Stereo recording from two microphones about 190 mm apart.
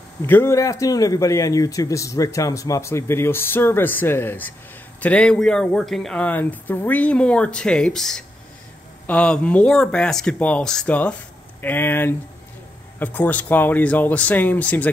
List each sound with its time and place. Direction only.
0.2 s speech: 15° left (ahead or behind)